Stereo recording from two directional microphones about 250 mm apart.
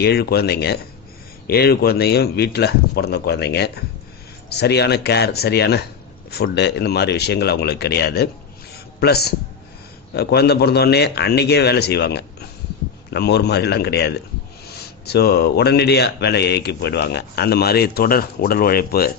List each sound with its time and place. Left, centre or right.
0.0 s a man's voice: left